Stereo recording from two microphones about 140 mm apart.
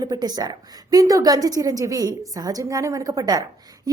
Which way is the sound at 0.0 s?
30° right (ahead or behind).